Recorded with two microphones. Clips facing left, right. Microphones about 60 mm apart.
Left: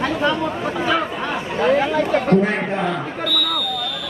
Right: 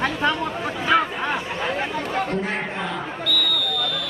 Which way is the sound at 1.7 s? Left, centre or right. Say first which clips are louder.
Left 8 dB; left.